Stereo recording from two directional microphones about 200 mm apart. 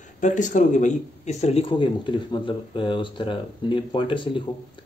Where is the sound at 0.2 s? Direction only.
40° left (ahead or behind).